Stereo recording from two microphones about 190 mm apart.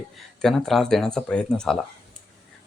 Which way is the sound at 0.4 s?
Centre (ahead or behind).